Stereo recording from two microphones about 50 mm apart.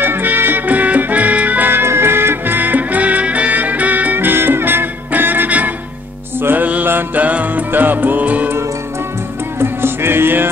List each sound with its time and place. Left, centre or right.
0.0 s music: right
1.7 s music: right
6.4 s mantra: right
7.2 s music: right
9.6 s music: right